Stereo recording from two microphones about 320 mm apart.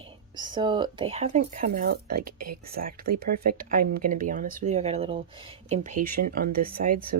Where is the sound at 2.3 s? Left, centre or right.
Right.